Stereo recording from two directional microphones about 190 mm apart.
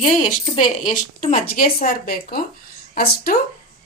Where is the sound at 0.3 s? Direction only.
40° left (ahead or behind).